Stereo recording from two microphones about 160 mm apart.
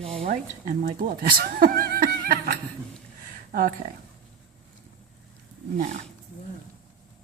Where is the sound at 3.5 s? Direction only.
60° right (ahead or behind).